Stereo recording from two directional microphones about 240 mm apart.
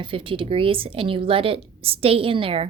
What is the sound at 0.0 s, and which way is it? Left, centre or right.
A woman's voice, right.